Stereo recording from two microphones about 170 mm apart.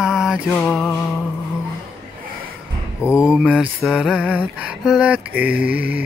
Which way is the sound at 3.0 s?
5° right (ahead or behind).